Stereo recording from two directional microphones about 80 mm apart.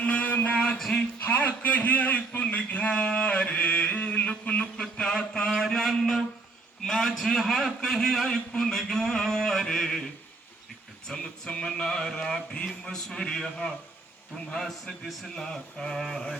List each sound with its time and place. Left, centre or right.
0.0 s a sound: centre
1.2 s a man's voice: left
11.1 s a man's voice: centre